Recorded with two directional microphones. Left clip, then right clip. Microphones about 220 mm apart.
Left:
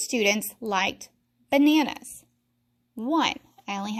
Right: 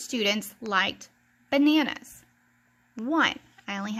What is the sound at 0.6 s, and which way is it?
Speech, 10° left (ahead or behind).